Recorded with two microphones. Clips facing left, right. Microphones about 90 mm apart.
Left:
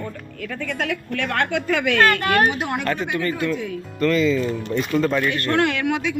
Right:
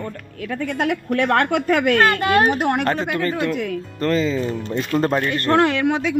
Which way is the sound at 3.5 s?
70° right (ahead or behind).